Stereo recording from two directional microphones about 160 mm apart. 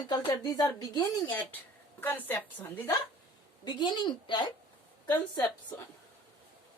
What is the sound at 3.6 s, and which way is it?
Speech, 30° left (ahead or behind).